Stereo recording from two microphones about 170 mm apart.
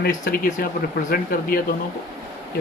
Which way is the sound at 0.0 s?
60° left (ahead or behind).